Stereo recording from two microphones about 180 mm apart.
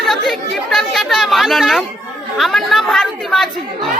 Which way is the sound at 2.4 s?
Centre (ahead or behind).